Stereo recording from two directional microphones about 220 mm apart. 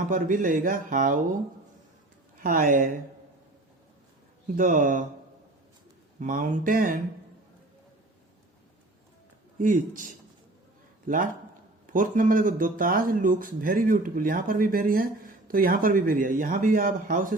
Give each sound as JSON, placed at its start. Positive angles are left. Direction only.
{"t": 0.1, "sound": "speech", "side_deg": -40}
{"t": 2.4, "sound": "speech", "side_deg": -40}
{"t": 4.5, "sound": "speech", "side_deg": -35}
{"t": 6.1, "sound": "speech", "side_deg": -35}
{"t": 9.6, "sound": "a man's voice", "side_deg": -35}